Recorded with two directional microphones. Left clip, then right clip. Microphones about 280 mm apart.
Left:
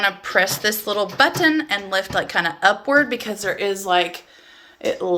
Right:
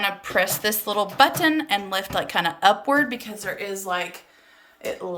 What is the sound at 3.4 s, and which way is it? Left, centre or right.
Speech, left.